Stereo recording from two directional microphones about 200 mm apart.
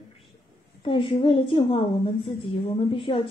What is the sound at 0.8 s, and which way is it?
A woman's voice, 25° left (ahead or behind).